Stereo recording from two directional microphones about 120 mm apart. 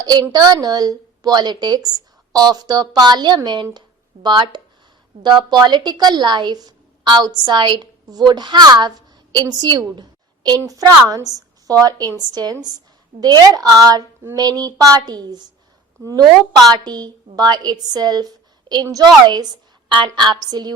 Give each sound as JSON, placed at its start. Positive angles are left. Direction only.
{"t": 0.0, "sound": "a woman's voice", "side_deg": -35}